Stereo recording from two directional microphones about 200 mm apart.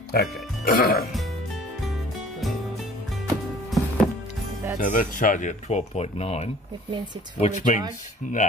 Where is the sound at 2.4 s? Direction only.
Centre (ahead or behind).